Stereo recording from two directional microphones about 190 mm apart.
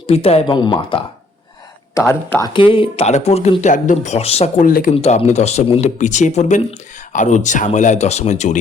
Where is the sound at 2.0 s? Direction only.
15° left (ahead or behind).